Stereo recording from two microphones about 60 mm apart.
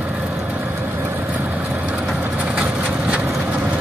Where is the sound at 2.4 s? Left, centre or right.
Centre.